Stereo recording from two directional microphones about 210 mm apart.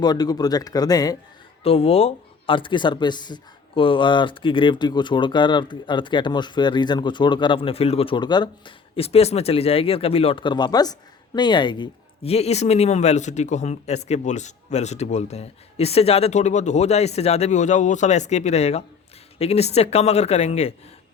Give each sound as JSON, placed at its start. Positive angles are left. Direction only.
{"t": 0.0, "sound": "speech", "side_deg": 20}